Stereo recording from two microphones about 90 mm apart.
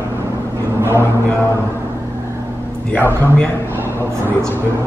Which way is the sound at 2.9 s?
15° left (ahead or behind).